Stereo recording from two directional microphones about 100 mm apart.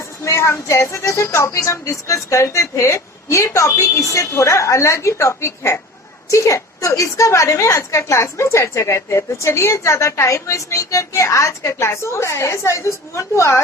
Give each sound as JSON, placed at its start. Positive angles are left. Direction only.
{"t": 0.3, "sound": "a woman's voice", "side_deg": 25}